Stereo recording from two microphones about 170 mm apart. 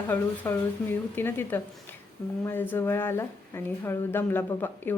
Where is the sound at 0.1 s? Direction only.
10° left (ahead or behind).